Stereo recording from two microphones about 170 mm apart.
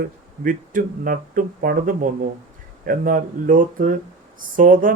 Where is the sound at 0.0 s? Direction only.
55° right (ahead or behind).